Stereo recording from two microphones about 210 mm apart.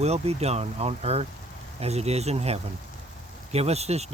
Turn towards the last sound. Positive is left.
turn(degrees=-30)  # may be behind; listen again after turning